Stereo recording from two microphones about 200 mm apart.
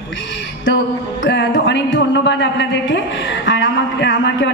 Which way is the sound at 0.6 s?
65° left (ahead or behind).